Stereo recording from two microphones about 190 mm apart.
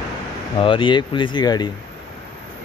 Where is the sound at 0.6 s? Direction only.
25° left (ahead or behind).